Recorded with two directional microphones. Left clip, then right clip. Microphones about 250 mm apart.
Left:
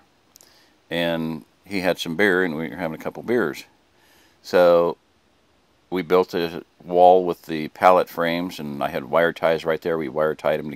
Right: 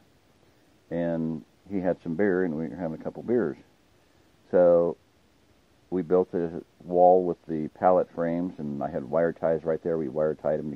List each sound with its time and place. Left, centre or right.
0.8 s speech: left